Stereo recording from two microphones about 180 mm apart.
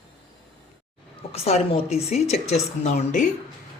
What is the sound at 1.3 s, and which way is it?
A woman's voice, 35° left (ahead or behind).